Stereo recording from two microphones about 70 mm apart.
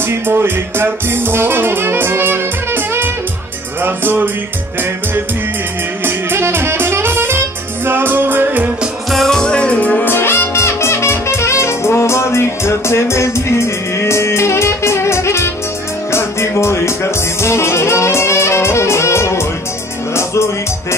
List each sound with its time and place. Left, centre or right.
0.0 s music: right
6.0 s music: right
9.1 s music: centre; by 10.1 s left
10.1 s music: left